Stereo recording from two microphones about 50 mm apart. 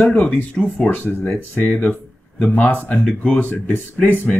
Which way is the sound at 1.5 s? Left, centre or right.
Left.